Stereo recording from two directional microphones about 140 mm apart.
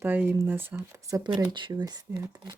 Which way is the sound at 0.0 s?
15° right (ahead or behind).